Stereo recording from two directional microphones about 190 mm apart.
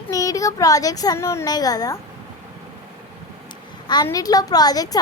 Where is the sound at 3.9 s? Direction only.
20° left (ahead or behind).